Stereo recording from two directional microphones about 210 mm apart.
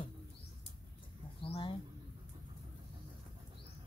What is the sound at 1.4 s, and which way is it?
Bird, 25° left (ahead or behind).